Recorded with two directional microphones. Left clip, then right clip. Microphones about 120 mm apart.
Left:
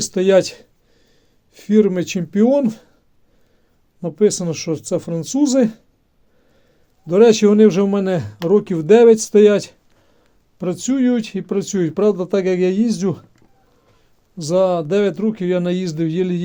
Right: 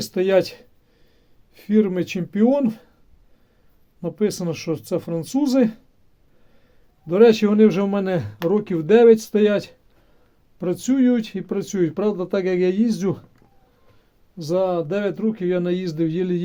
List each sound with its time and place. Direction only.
0.0 s a sound: 40° left (ahead or behind)
1.5 s speech: 45° left (ahead or behind)
4.0 s speech: 35° left (ahead or behind)
7.1 s speech: 35° left (ahead or behind)
14.3 s speech: 60° left (ahead or behind); by 16.4 s 40° left (ahead or behind)